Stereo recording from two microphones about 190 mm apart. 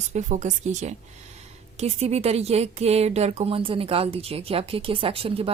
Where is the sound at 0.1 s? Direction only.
40° right (ahead or behind).